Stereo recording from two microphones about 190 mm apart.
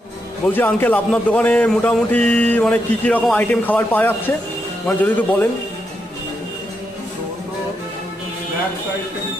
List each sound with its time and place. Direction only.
0.5 s speech: 10° left (ahead or behind)